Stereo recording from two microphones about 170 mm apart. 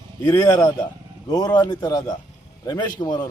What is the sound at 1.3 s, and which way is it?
Speech, 25° left (ahead or behind).